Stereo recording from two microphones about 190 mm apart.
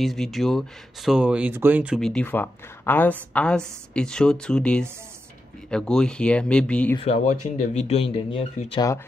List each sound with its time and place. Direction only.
0.0 s a woman's voice: centre (ahead or behind)
2.0 s a woman's voice: 5° left (ahead or behind)
7.0 s speech: 35° left (ahead or behind)